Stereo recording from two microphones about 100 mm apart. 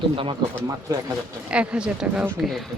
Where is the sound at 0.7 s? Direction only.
35° right (ahead or behind).